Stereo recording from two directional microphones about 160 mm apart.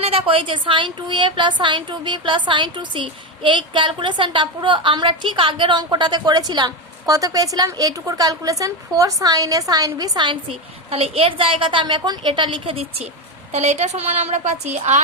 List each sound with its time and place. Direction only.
0.0 s a woman's voice: 35° right (ahead or behind)
10.9 s a woman's voice: 35° right (ahead or behind)